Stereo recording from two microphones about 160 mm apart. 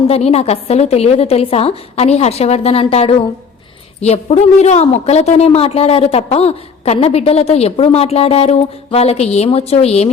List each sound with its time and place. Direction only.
0.1 s a woman's voice: 40° left (ahead or behind)